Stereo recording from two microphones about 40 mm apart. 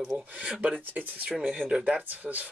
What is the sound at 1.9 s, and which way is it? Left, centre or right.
Speech, right.